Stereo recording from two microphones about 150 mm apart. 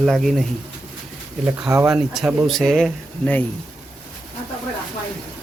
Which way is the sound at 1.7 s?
20° right (ahead or behind).